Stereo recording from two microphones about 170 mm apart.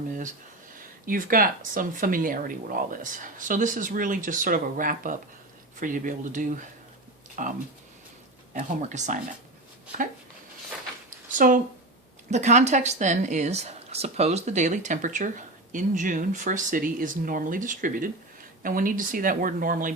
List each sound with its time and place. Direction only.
1.0 s speech: 55° right (ahead or behind)
8.5 s speech: 45° right (ahead or behind)
11.3 s speech: 50° right (ahead or behind)